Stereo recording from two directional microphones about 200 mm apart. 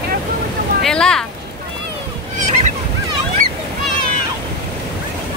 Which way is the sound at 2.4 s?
35° right (ahead or behind).